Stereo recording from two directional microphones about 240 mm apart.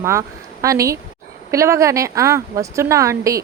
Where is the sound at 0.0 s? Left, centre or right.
Centre.